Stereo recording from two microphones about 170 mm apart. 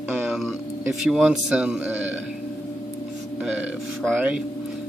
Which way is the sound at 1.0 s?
5° right (ahead or behind).